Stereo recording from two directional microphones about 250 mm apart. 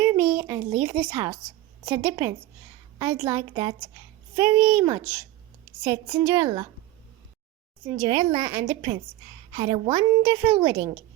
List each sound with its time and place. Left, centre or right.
0.0 s a sound: centre
0.8 s a woman's voice: centre
7.9 s a woman's voice: centre